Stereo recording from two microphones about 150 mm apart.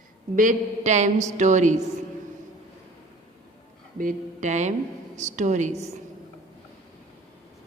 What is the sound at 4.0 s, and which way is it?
A woman's voice, 60° right (ahead or behind).